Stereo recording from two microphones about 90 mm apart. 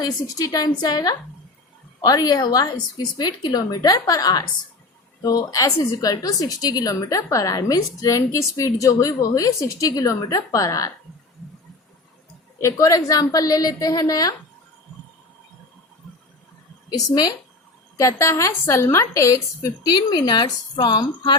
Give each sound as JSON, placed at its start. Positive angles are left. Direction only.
{"t": 0.0, "sound": "a woman's voice", "side_deg": 40}
{"t": 12.5, "sound": "a woman's voice", "side_deg": 35}
{"t": 16.9, "sound": "a woman's voice", "side_deg": 45}
{"t": 17.9, "sound": "a woman's voice", "side_deg": 35}
{"t": 19.8, "sound": "a woman's voice", "side_deg": 50}